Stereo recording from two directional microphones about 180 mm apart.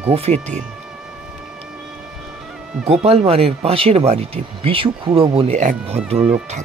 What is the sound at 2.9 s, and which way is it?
Speech, 35° right (ahead or behind).